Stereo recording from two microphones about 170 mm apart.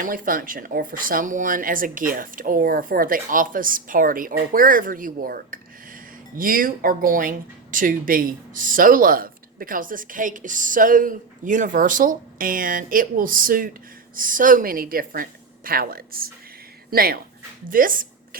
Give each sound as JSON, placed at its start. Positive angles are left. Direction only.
{"t": 0.0, "sound": "speech", "side_deg": -55}